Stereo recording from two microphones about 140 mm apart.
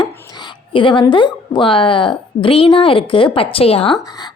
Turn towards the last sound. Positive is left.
turn(degrees=45)  # may be behind; listen again after turning